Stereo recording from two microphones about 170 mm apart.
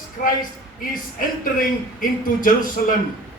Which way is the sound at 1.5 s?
55° left (ahead or behind).